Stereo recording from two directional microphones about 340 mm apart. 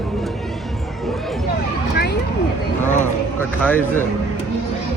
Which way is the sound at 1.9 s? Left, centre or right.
Left.